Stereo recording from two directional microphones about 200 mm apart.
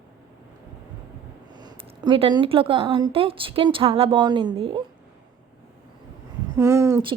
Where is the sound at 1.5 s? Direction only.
20° right (ahead or behind).